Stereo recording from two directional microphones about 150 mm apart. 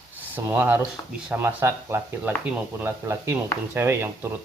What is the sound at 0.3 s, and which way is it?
Speech, 15° right (ahead or behind).